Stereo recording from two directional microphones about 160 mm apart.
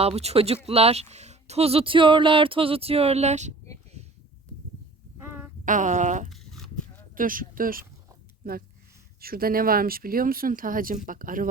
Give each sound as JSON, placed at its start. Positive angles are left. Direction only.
{"t": 0.0, "sound": "speech", "side_deg": -40}
{"t": 5.6, "sound": "speech", "side_deg": -50}
{"t": 6.3, "sound": "a sound", "side_deg": 0}
{"t": 7.2, "sound": "speech", "side_deg": -60}